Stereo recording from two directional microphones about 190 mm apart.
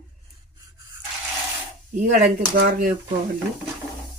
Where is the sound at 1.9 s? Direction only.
40° right (ahead or behind).